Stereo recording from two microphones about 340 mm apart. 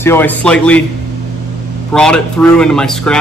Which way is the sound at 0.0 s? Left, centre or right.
Centre.